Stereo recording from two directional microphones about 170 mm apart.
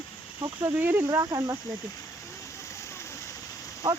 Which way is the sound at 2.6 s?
15° left (ahead or behind).